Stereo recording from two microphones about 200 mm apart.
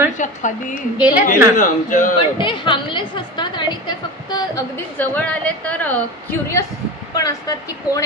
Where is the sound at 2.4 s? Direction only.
25° left (ahead or behind).